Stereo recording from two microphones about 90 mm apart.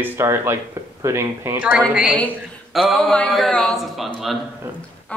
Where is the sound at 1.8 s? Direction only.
10° right (ahead or behind).